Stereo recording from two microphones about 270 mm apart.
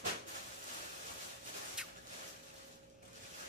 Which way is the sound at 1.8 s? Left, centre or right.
Centre.